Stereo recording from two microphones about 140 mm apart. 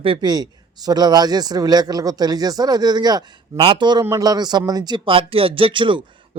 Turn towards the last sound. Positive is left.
turn(degrees=-35)  # may be behind; listen again after turning